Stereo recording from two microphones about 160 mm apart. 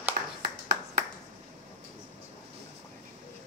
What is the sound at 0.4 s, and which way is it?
Clapping, 75° right (ahead or behind).